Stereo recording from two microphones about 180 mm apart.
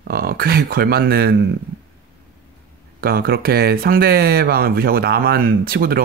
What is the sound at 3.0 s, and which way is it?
Speech, 55° right (ahead or behind).